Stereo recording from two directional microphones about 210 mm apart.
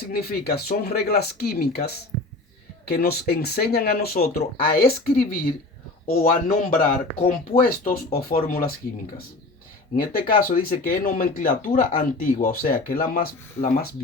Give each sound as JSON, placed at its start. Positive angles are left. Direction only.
{"t": 0.0, "sound": "speech", "side_deg": 45}
{"t": 9.9, "sound": "speech", "side_deg": 40}